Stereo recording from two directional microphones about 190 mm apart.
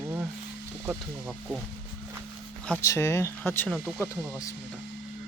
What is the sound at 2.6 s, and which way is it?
Speech, 10° left (ahead or behind).